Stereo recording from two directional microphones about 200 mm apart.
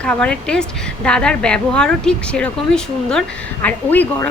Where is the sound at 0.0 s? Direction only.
5° left (ahead or behind).